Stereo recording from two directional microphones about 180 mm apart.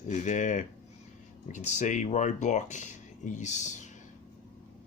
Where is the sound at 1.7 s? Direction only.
40° left (ahead or behind).